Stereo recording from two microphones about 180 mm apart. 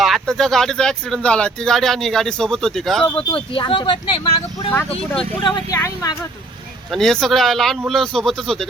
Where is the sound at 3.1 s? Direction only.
30° left (ahead or behind).